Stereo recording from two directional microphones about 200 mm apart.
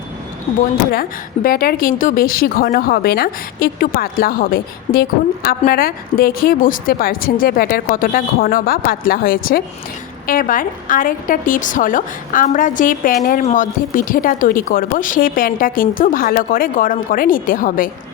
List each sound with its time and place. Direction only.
1.5 s speech: 45° left (ahead or behind)